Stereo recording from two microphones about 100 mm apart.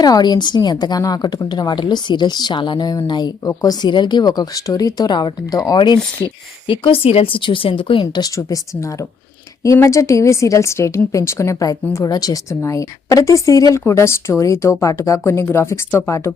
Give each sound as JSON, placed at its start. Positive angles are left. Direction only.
{"t": 0.0, "sound": "a woman's voice", "side_deg": 45}
{"t": 3.4, "sound": "speech", "side_deg": 35}
{"t": 6.2, "sound": "speech", "side_deg": 60}
{"t": 8.1, "sound": "speech", "side_deg": 40}